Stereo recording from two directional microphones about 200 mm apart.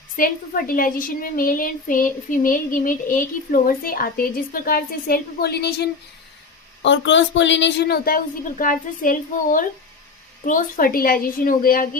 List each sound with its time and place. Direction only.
0.2 s a child's voice: 45° left (ahead or behind)